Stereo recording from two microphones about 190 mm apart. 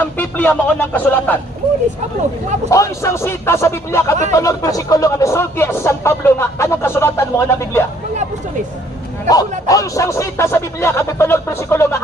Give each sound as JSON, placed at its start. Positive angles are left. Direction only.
{"t": 0.0, "sound": "speech", "side_deg": 10}
{"t": 2.6, "sound": "speech", "side_deg": 15}
{"t": 9.2, "sound": "a man's voice", "side_deg": 20}